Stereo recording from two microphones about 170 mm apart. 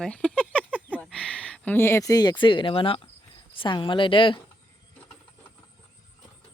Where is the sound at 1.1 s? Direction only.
5° left (ahead or behind); by 4.3 s 30° left (ahead or behind).